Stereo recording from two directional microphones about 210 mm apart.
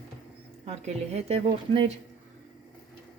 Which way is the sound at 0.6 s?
30° right (ahead or behind).